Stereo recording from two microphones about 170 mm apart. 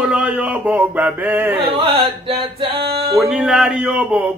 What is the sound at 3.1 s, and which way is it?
Speech, centre (ahead or behind).